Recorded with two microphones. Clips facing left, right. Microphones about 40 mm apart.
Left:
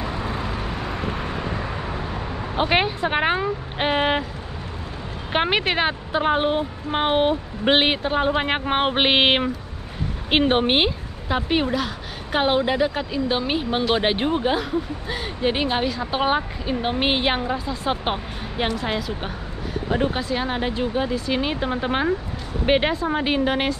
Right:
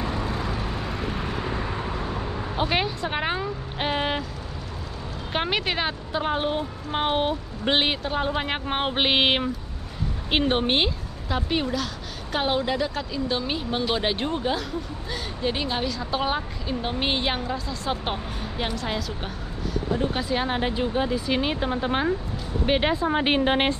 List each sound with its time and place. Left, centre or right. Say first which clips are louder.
0.3 s vehicle: left 1 dB; left
2.5 s speech: left 5 dB; left
5.3 s a woman's voice: left 5 dB; left
20.2 s speech: left 1 dB; centre
21.6 s a woman's voice: left 2 dB; centre
23.2 s a woman's voice: even; right